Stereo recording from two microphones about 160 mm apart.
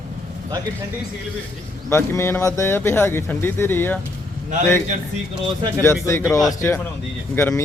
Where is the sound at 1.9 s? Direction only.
15° left (ahead or behind).